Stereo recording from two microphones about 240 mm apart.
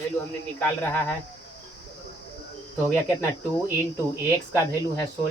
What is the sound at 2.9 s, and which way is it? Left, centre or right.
Speech, centre.